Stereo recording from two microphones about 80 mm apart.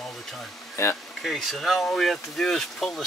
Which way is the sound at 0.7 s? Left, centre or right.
Left.